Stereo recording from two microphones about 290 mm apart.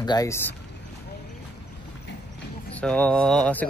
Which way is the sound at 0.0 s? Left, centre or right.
Centre.